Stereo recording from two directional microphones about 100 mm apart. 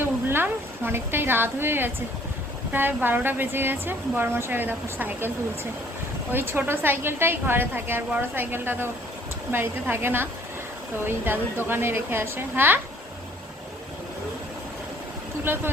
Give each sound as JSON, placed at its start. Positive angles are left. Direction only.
{"t": 0.0, "sound": "a sound", "side_deg": -20}
{"t": 2.7, "sound": "speech", "side_deg": -20}
{"t": 6.3, "sound": "speech", "side_deg": -20}